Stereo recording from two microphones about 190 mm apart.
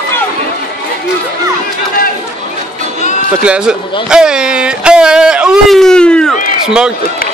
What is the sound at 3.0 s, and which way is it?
Music, 40° left (ahead or behind).